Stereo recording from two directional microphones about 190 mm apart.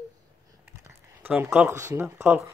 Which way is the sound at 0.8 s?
10° right (ahead or behind).